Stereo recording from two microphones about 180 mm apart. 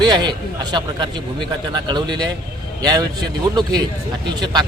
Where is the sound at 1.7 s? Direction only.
25° right (ahead or behind).